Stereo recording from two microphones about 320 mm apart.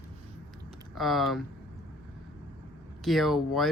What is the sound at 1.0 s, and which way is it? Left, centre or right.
Speech, centre.